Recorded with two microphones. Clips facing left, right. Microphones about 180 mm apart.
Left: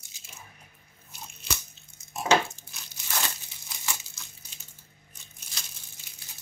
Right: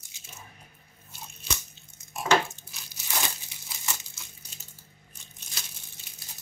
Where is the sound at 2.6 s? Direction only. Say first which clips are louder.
Right 1 dB; 90° left.